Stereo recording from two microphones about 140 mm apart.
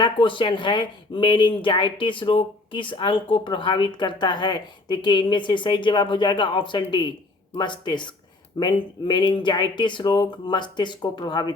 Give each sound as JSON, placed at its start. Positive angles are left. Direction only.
{"t": 0.0, "sound": "speech", "side_deg": 35}